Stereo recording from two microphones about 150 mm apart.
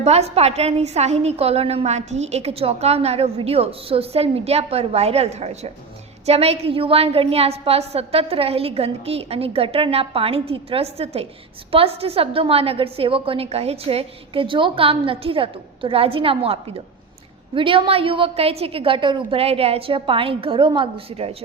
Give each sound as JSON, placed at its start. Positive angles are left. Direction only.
{"t": 0.0, "sound": "a woman's voice", "side_deg": -45}